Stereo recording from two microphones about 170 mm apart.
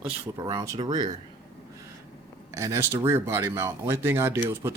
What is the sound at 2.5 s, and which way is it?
Speech, 15° right (ahead or behind).